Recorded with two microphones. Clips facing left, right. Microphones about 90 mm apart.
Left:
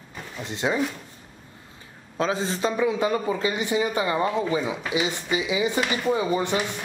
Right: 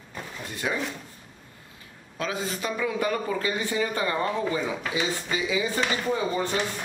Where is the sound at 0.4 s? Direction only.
25° left (ahead or behind).